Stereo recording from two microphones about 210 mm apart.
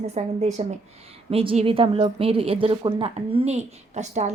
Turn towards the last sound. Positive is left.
turn(degrees=-35)  # may be behind; listen again after turning